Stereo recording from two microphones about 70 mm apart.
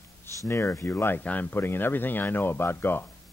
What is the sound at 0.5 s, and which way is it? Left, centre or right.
Speech, left.